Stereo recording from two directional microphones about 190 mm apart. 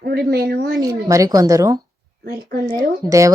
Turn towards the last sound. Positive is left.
turn(degrees=-15)  # may be behind; listen again after turning